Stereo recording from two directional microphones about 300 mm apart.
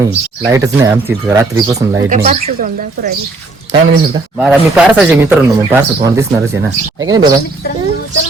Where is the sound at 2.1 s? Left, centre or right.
Right.